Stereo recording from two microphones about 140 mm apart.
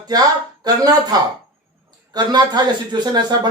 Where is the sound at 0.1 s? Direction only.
25° right (ahead or behind).